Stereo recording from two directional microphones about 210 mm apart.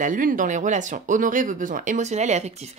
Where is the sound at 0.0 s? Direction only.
40° right (ahead or behind).